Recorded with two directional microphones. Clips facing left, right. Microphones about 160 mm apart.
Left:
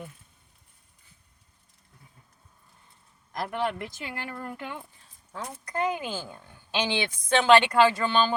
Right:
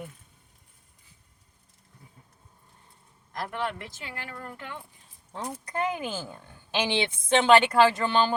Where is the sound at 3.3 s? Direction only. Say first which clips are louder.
Left 3 dB; 15° left (ahead or behind).